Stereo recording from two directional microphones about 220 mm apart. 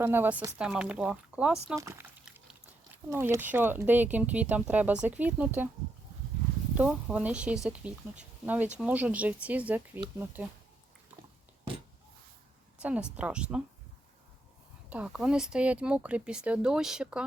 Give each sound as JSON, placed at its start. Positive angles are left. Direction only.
{"t": 0.0, "sound": "speech", "side_deg": -10}
{"t": 3.1, "sound": "speech", "side_deg": -10}
{"t": 6.7, "sound": "speech", "side_deg": -5}
{"t": 12.8, "sound": "speech", "side_deg": -5}
{"t": 14.8, "sound": "speech", "side_deg": -5}